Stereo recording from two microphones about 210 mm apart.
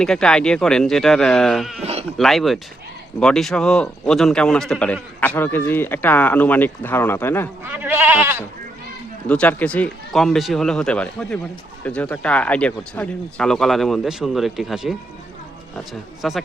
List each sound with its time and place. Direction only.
0.0 s speech: 5° left (ahead or behind)
1.8 s sheep: 30° right (ahead or behind)
2.1 s a man's voice: centre (ahead or behind)
7.6 s goat: 10° right (ahead or behind)
9.2 s speech: 5° left (ahead or behind)
16.2 s speech: centre (ahead or behind)